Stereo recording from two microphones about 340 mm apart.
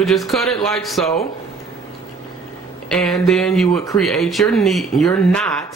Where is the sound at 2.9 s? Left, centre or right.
Centre.